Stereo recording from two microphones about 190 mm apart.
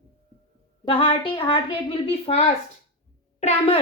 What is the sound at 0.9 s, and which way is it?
A woman's voice, 25° left (ahead or behind).